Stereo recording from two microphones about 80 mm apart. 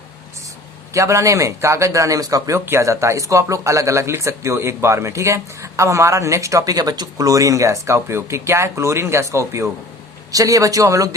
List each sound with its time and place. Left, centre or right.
0.9 s speech: right